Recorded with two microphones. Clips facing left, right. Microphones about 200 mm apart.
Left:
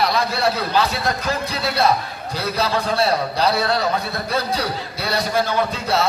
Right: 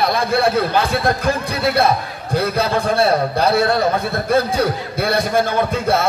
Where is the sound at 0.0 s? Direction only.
55° right (ahead or behind).